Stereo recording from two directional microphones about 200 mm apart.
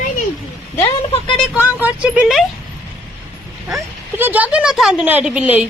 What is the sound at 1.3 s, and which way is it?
Speech, centre (ahead or behind).